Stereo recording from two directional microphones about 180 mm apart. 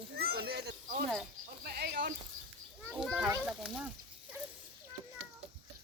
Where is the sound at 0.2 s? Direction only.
60° right (ahead or behind).